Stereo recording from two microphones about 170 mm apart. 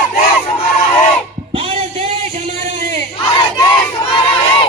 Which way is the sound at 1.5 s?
35° right (ahead or behind).